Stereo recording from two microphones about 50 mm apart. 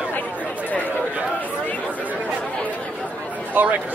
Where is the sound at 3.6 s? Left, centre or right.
Right.